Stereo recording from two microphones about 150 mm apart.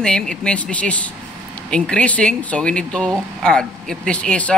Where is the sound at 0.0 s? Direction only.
5° left (ahead or behind).